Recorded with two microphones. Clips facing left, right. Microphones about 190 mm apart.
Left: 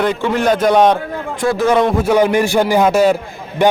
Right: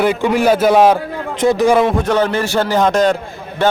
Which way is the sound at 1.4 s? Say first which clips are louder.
Right 2 dB; 20° right (ahead or behind).